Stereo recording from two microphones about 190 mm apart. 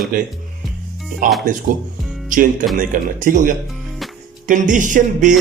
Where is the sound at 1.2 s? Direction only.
45° right (ahead or behind).